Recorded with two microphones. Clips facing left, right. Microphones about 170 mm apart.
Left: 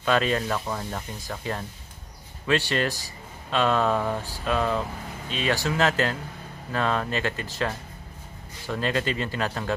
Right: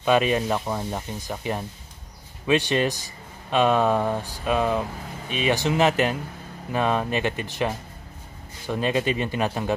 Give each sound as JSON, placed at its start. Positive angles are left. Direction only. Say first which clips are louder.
{"t": 0.0, "sound": "speech", "louder": "right 3 dB", "side_deg": -15}